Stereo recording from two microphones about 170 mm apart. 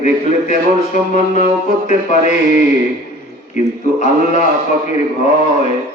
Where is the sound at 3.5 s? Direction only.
45° left (ahead or behind).